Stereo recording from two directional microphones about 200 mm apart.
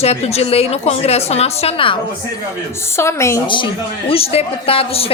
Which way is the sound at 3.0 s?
15° left (ahead or behind).